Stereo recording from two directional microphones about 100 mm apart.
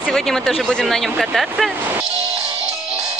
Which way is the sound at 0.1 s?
5° left (ahead or behind).